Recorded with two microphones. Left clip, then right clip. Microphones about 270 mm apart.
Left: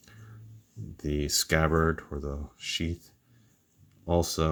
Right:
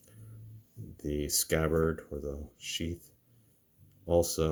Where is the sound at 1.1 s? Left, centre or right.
Left.